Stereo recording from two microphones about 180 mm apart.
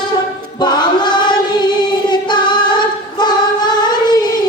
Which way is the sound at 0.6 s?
25° left (ahead or behind).